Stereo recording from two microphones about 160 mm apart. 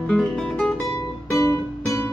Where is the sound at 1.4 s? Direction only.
20° left (ahead or behind).